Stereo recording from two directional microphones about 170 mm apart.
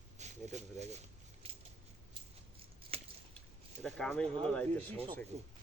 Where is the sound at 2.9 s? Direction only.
35° right (ahead or behind).